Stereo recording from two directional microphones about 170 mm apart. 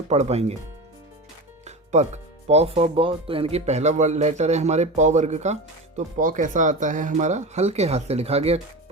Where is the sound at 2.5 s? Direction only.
35° right (ahead or behind).